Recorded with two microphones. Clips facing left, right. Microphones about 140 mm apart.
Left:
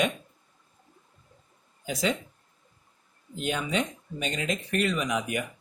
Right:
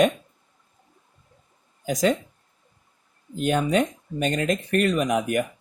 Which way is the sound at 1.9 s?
45° right (ahead or behind).